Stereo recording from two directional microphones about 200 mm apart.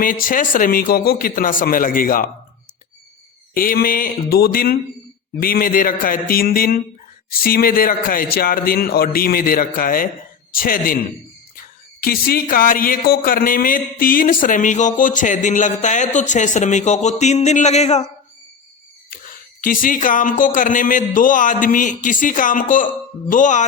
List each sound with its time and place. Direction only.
0.0 s a man's voice: 45° left (ahead or behind)
3.5 s a man's voice: 45° left (ahead or behind)
19.1 s speech: 45° left (ahead or behind)